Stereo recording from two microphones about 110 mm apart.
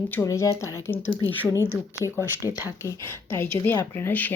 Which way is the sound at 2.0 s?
25° right (ahead or behind).